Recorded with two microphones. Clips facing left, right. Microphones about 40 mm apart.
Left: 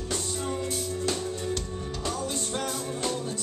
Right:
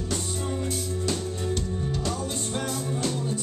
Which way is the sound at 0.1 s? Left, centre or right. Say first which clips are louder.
Even; centre.